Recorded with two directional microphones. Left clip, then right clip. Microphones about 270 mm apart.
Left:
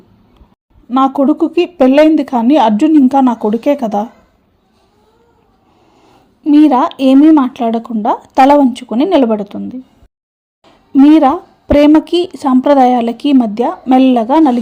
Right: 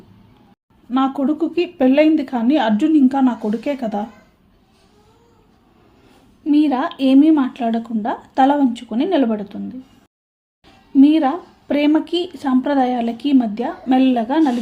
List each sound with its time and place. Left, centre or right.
0.9 s a woman's voice: left
6.4 s a woman's voice: left
11.0 s a woman's voice: left